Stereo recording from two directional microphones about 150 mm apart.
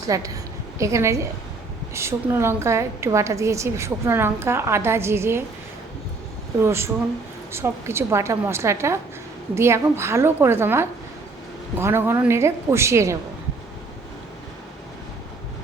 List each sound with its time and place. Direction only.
0.1 s a woman's voice: 20° right (ahead or behind)
6.6 s a woman's voice: 15° right (ahead or behind)